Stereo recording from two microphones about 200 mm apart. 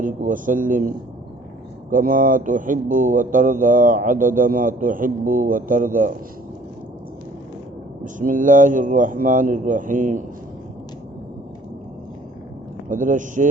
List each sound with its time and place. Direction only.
0.0 s speech: 40° right (ahead or behind)
8.0 s a man's voice: 40° right (ahead or behind)
12.9 s a man's voice: 40° right (ahead or behind)